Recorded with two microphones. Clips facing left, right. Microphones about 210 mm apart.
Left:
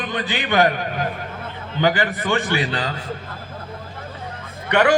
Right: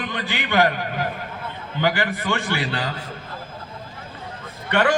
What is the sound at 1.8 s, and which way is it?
A man's voice, 20° left (ahead or behind).